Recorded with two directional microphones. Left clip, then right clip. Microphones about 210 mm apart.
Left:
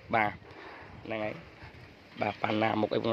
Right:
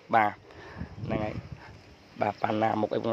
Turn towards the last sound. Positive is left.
turn(degrees=0)  # may be behind; listen again after turning